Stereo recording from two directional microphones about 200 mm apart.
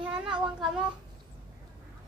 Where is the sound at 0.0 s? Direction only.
5° right (ahead or behind).